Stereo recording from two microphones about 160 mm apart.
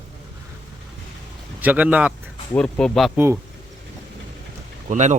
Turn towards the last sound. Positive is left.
turn(degrees=-50)  # may be behind; listen again after turning